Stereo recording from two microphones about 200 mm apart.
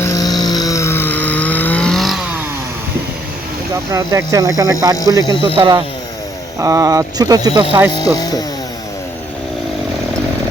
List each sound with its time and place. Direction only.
0.0 s a sound: 20° left (ahead or behind); by 2.2 s centre (ahead or behind)
3.9 s speech: 15° right (ahead or behind)
5.2 s speech: 25° left (ahead or behind)
5.5 s speech: 20° right (ahead or behind)
7.9 s speech: 20° left (ahead or behind)